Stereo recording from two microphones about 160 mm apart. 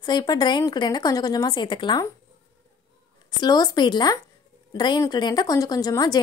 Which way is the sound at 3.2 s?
25° left (ahead or behind).